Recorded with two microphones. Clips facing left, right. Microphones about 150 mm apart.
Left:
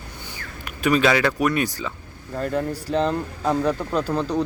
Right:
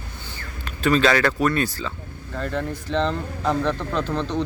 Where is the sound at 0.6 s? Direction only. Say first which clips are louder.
Even; 15° left (ahead or behind).